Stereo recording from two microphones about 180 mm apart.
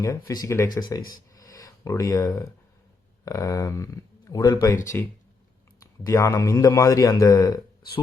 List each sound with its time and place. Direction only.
0.3 s speech: 15° left (ahead or behind)
1.4 s a sound: 20° left (ahead or behind)
3.2 s a man's voice: 20° left (ahead or behind)